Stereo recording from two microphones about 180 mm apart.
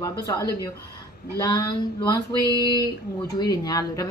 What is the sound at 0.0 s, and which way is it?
A woman's voice, 20° left (ahead or behind).